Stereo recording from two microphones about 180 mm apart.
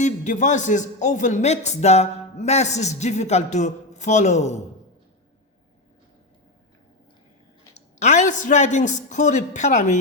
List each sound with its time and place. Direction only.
0.0 s a man's voice: 40° left (ahead or behind)
8.0 s a man's voice: 40° left (ahead or behind)